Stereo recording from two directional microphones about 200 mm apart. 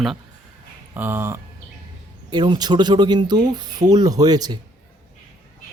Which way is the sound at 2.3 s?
20° right (ahead or behind).